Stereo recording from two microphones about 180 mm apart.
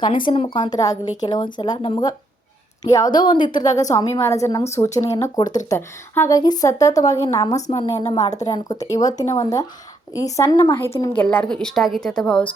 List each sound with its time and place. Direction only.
0.3 s a woman's voice: 30° left (ahead or behind)
7.5 s a woman's voice: 35° left (ahead or behind)
7.9 s a woman's voice: 20° left (ahead or behind); by 12.5 s 5° left (ahead or behind)